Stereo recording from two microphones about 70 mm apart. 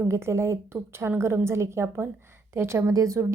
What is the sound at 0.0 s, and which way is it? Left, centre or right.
A woman's voice, right.